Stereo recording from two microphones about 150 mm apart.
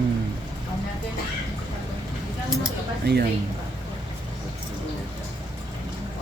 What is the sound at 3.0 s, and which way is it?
Speech, 90° right.